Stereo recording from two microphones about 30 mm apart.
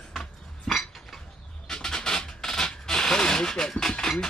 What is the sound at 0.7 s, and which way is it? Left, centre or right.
Chink, centre.